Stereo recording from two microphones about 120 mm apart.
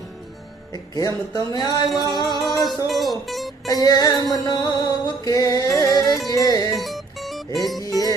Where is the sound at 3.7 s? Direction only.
30° left (ahead or behind).